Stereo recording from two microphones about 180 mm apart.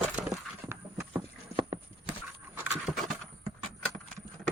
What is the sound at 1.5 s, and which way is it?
Clip-clop, 35° right (ahead or behind).